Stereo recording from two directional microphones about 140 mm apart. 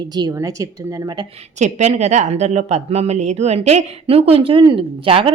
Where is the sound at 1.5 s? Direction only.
55° right (ahead or behind).